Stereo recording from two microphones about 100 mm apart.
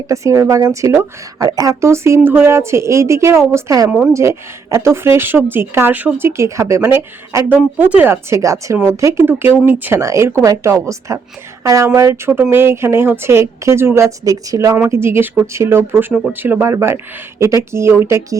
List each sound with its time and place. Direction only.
0.1 s speech: 30° right (ahead or behind)
3.8 s speech: 10° right (ahead or behind)
4.1 s a woman's voice: 30° right (ahead or behind)